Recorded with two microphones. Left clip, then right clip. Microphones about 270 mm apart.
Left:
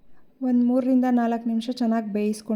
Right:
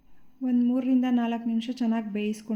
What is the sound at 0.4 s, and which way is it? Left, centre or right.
A woman's voice, left.